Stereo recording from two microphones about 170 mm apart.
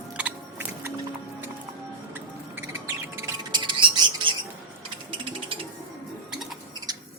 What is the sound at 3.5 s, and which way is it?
Bird, 25° right (ahead or behind).